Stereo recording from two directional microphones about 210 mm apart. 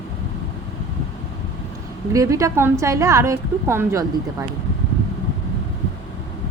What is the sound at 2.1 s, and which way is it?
A woman's voice, 15° right (ahead or behind).